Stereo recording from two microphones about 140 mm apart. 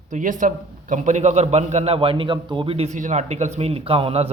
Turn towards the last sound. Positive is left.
turn(degrees=-45)  # may be behind; listen again after turning